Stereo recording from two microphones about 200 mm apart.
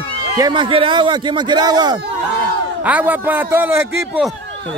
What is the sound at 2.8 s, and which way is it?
A man's voice, 10° right (ahead or behind).